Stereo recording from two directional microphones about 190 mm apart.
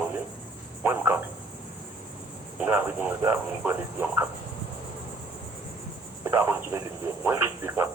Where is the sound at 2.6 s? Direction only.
10° right (ahead or behind).